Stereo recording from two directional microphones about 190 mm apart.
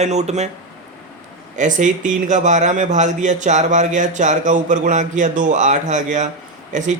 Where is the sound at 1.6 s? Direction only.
40° right (ahead or behind).